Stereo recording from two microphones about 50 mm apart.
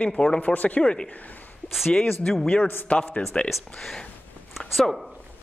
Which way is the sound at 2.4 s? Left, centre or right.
Centre.